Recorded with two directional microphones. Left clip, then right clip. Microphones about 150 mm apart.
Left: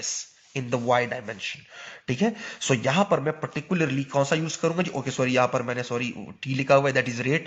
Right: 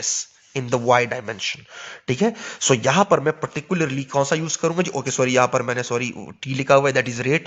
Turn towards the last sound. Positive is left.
turn(degrees=-35)  # may be behind; listen again after turning